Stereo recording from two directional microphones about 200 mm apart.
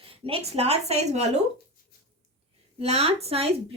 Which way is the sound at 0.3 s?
30° right (ahead or behind).